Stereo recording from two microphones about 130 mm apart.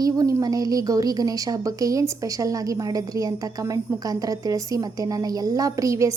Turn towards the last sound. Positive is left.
turn(degrees=-25)  # may be behind; listen again after turning